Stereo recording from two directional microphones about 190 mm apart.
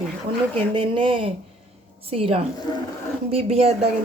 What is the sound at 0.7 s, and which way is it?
Speech, 25° right (ahead or behind).